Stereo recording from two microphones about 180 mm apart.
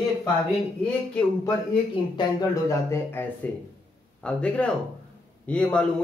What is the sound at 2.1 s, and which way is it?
Speech, 20° left (ahead or behind).